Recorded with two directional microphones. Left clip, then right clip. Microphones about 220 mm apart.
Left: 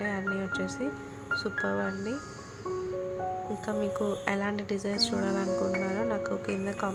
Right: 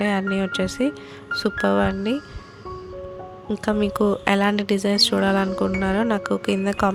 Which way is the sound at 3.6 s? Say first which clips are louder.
Right 12 dB; 45° right (ahead or behind).